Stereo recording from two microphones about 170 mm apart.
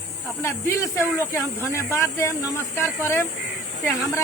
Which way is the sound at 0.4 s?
15° left (ahead or behind).